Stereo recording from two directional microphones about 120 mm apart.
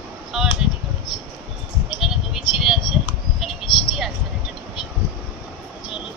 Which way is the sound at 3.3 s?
Centre (ahead or behind).